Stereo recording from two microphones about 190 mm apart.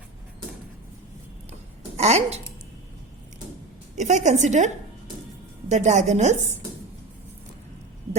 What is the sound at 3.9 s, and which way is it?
Speech, 40° right (ahead or behind).